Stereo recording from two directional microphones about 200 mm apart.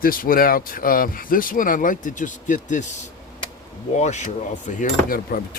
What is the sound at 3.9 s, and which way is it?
Speech, 35° left (ahead or behind).